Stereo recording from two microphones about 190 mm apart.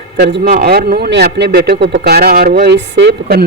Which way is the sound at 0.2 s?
60° right (ahead or behind).